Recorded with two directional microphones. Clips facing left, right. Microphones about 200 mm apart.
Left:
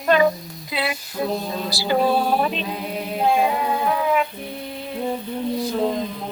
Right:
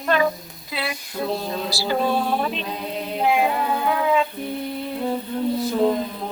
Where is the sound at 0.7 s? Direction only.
20° left (ahead or behind).